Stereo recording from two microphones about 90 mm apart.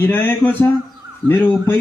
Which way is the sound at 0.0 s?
20° left (ahead or behind).